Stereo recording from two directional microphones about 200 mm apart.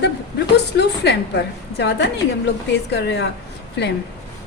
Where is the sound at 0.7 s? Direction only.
60° left (ahead or behind).